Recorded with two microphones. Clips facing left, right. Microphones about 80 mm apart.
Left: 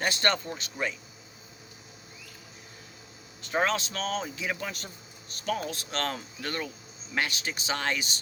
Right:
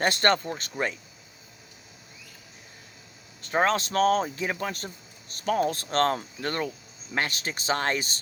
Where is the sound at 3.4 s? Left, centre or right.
Right.